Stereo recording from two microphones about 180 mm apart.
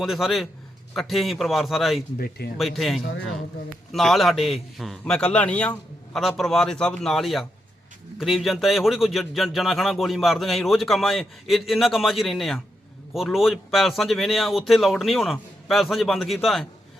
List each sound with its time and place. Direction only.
0.0 s a man's voice: centre (ahead or behind)
2.1 s speech: 55° left (ahead or behind)
2.6 s a man's voice: centre (ahead or behind)